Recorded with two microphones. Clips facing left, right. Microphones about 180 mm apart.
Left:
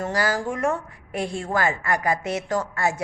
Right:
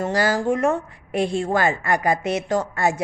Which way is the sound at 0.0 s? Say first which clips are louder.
Right 4 dB; 25° right (ahead or behind).